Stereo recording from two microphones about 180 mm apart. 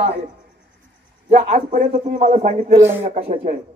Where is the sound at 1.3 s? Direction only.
40° right (ahead or behind).